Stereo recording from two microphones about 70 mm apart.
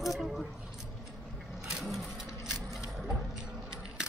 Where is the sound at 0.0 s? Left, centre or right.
Centre.